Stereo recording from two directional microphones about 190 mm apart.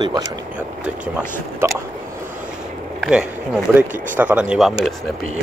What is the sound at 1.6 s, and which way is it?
Boat, 15° right (ahead or behind).